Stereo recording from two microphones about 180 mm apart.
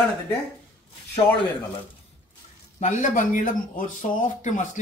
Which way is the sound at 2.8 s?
45° left (ahead or behind).